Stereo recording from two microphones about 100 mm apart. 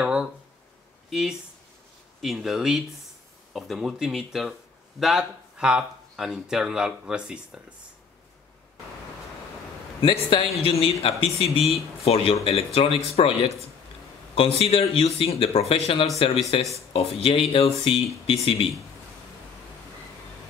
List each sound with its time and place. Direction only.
0.0 s a sound: 10° right (ahead or behind)
2.2 s speech: 5° right (ahead or behind)
10.0 s a man's voice: 70° left (ahead or behind)
12.0 s a man's voice: 85° left
12.4 s speech: 70° left (ahead or behind)